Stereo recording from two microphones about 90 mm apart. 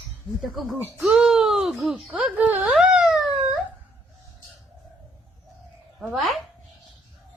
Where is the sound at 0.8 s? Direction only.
25° right (ahead or behind).